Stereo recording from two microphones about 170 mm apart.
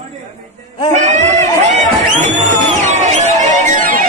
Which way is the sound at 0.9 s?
45° right (ahead or behind).